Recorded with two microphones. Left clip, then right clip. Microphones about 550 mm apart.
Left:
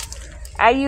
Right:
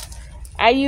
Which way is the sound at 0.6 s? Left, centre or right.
Right.